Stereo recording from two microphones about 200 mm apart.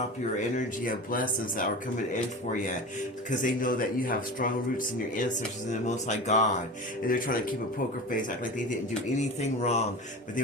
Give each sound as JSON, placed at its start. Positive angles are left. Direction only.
{"t": 0.5, "sound": "speech", "side_deg": 45}
{"t": 3.2, "sound": "speech", "side_deg": 40}
{"t": 5.8, "sound": "speech", "side_deg": 35}